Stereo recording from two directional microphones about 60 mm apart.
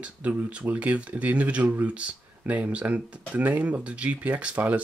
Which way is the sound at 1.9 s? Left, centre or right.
Right.